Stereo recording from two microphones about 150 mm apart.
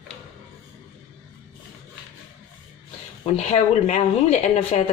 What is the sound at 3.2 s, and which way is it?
A woman's voice, 45° left (ahead or behind).